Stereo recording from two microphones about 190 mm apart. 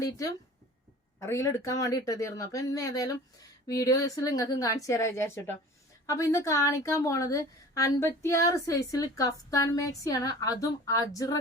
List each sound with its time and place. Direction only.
0.0 s a woman's voice: 20° left (ahead or behind)